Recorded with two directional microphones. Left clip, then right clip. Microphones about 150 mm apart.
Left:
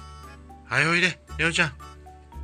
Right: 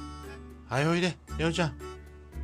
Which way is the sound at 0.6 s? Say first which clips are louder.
Left 7 dB; 15° right (ahead or behind).